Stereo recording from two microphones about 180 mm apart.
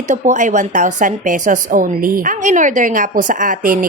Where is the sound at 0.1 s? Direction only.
45° right (ahead or behind).